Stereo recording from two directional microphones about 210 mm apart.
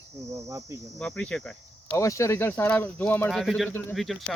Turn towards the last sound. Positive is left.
turn(degrees=0)  # may be behind; listen again after turning